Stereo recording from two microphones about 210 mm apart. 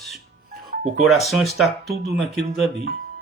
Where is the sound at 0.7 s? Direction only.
30° right (ahead or behind).